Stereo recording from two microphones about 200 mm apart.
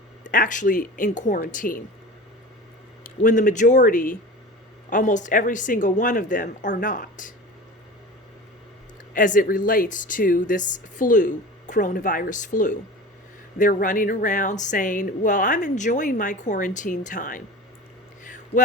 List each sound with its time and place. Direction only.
0.3 s a woman's voice: 40° left (ahead or behind)
3.0 s a woman's voice: 40° left (ahead or behind)
9.1 s a woman's voice: 40° left (ahead or behind)
18.2 s a sound: 40° left (ahead or behind)